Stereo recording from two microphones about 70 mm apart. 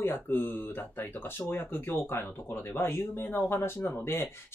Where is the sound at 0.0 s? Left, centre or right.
Left.